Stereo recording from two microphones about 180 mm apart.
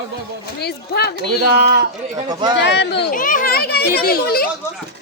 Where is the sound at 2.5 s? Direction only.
75° left (ahead or behind).